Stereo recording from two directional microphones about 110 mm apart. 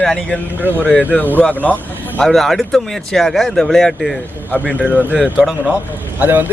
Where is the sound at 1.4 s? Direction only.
15° left (ahead or behind).